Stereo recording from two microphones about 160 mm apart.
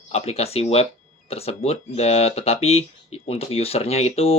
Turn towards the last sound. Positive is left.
turn(degrees=40)  # may be behind; listen again after turning